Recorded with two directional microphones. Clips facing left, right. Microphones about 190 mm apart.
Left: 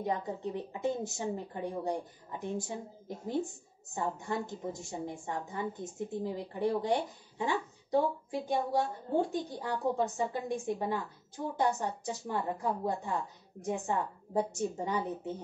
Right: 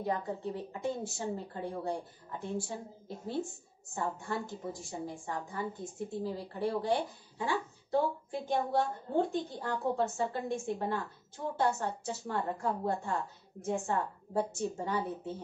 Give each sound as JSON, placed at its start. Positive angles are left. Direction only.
{"t": 0.0, "sound": "a woman's voice", "side_deg": 20}